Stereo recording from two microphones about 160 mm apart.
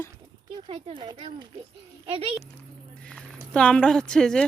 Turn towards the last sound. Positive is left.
turn(degrees=5)  # may be behind; listen again after turning